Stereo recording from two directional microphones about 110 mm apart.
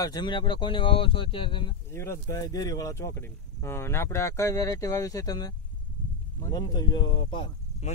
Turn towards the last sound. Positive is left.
turn(degrees=45)  # may be behind; listen again after turning